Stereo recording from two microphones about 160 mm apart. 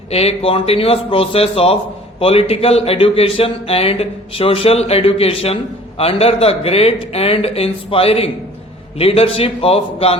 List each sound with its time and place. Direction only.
0.1 s a man's voice: 40° left (ahead or behind)